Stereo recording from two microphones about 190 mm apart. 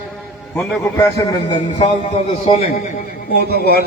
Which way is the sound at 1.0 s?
20° left (ahead or behind).